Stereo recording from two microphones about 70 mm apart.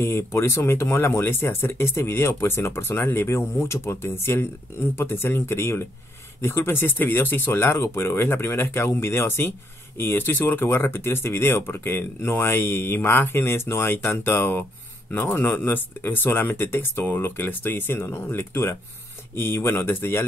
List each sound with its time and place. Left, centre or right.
0.0 s speech: left